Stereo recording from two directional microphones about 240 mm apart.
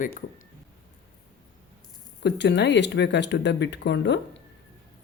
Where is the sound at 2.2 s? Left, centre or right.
Left.